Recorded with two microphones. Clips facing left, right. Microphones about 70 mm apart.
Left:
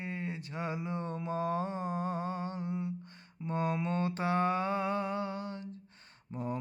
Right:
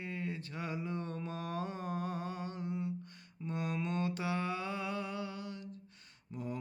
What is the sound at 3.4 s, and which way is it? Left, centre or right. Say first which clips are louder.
Mantra: left 5 dB; left.